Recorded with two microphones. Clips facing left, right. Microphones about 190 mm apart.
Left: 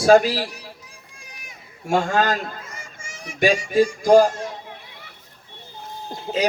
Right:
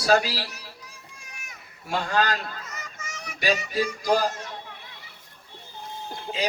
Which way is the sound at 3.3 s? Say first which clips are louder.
Left 8 dB; 50° left (ahead or behind).